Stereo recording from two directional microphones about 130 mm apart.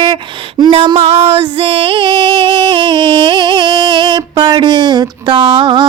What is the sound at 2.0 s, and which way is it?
Music, 40° right (ahead or behind).